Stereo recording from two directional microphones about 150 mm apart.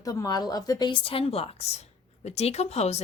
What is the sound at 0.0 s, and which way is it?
A woman's voice, 25° left (ahead or behind).